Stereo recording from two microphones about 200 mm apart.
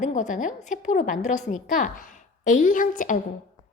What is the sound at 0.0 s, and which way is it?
A woman's voice, 40° left (ahead or behind).